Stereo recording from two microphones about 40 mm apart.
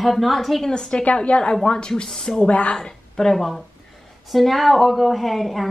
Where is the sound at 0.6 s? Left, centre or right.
Centre.